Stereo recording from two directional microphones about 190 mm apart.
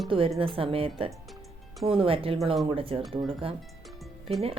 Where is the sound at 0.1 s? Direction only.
30° right (ahead or behind).